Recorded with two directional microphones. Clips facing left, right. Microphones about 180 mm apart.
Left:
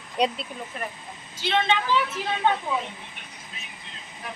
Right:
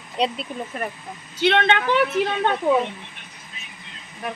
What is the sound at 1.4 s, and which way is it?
A woman's voice, 65° right (ahead or behind).